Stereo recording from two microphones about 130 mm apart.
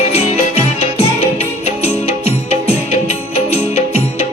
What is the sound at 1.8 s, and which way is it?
Music, 55° left (ahead or behind).